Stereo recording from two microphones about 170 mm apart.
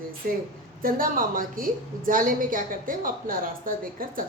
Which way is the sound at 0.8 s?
55° right (ahead or behind).